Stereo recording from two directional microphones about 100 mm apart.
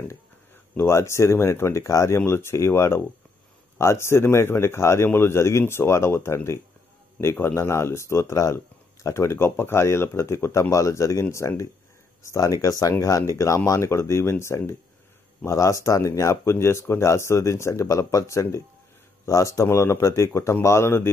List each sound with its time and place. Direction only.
0.7 s speech: 25° left (ahead or behind)